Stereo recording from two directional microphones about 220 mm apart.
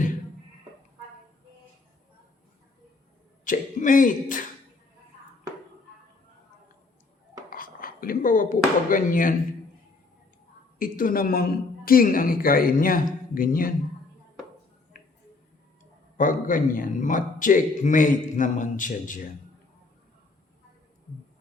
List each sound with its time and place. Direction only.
3.4 s speech: 35° left (ahead or behind)
7.5 s speech: 40° left (ahead or behind)
10.8 s a man's voice: 40° left (ahead or behind)
16.1 s a man's voice: 35° left (ahead or behind)